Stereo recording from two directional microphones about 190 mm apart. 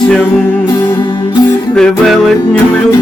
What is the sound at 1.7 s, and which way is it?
Music, centre (ahead or behind).